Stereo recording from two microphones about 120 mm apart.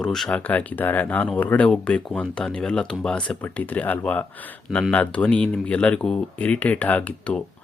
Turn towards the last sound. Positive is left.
turn(degrees=10)  # may be behind; listen again after turning